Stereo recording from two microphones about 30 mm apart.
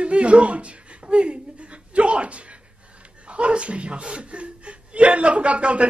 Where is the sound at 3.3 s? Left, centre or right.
Right.